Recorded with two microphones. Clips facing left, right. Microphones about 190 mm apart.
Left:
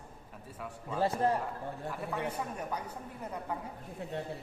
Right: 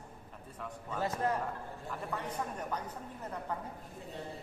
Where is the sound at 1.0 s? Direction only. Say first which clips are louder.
Left 4 dB; 30° left (ahead or behind).